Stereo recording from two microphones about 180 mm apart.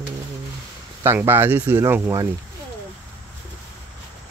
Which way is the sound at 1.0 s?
15° right (ahead or behind).